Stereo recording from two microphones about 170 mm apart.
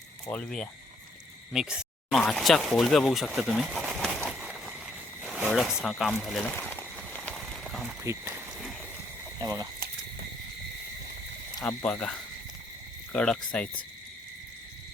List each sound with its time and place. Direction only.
0.3 s speech: 5° left (ahead or behind)
6.4 s a sound: 10° left (ahead or behind)
8.0 s speech: 15° right (ahead or behind)
9.4 s speech: 20° right (ahead or behind)
11.6 s speech: 5° left (ahead or behind)
13.1 s speech: 5° left (ahead or behind)